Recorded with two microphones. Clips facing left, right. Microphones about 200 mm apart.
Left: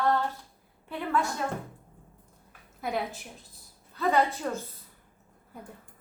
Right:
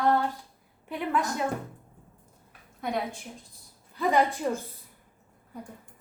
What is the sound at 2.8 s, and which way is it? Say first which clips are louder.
Speech: right 1 dB; centre (ahead or behind).